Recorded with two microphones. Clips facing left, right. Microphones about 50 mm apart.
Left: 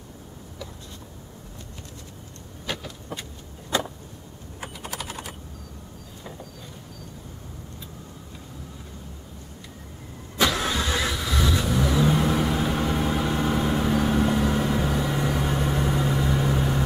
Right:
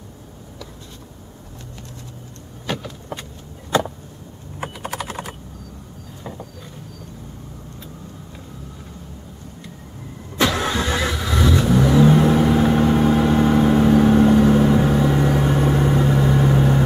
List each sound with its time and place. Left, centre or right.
2.7 s vehicle: centre
4.6 s typing: right
10.4 s vehicle: centre